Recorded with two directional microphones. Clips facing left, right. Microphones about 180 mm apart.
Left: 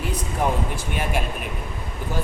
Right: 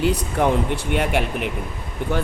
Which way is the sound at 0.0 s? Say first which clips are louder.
Right 5 dB; 70° right (ahead or behind).